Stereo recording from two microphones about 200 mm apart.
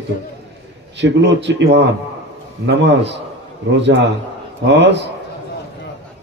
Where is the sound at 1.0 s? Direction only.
60° right (ahead or behind).